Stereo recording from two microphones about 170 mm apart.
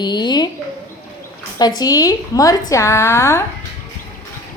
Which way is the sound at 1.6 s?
20° left (ahead or behind).